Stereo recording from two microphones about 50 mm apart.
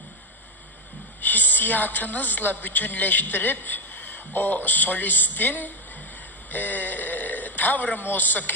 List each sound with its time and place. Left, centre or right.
1.2 s a woman's voice: left